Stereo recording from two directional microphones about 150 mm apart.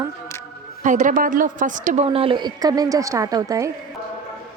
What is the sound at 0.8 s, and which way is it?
A woman's voice, 55° right (ahead or behind).